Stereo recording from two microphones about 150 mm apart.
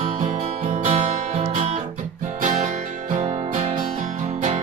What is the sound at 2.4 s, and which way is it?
Music, 60° right (ahead or behind).